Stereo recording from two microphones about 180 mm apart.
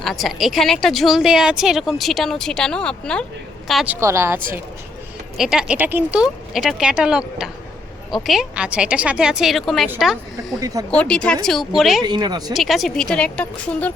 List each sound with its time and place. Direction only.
0.0 s speech: centre (ahead or behind)
4.0 s speech: 15° right (ahead or behind)
5.4 s speech: 5° right (ahead or behind)
12.0 s speech: 25° right (ahead or behind)
12.5 s speech: centre (ahead or behind)